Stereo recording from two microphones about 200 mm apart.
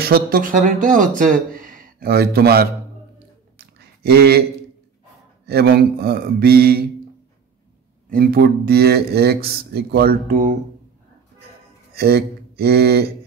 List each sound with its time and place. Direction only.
0.0 s speech: 50° right (ahead or behind)
3.5 s a sound: 55° right (ahead or behind)
5.5 s speech: 50° right (ahead or behind)
8.1 s speech: 50° right (ahead or behind)
11.9 s speech: 55° right (ahead or behind)